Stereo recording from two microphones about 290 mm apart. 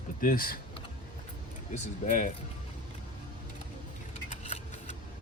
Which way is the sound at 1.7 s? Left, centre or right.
Left.